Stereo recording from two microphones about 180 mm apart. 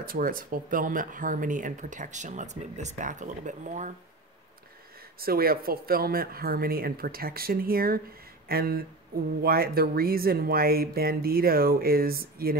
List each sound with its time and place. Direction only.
0.0 s speech: 50° right (ahead or behind)
5.2 s speech: 55° right (ahead or behind)